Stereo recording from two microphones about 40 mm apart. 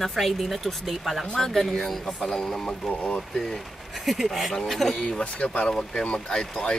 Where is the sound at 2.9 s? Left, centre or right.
Left.